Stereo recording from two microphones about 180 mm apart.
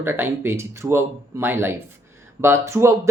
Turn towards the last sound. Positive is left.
turn(degrees=-15)  # may be behind; listen again after turning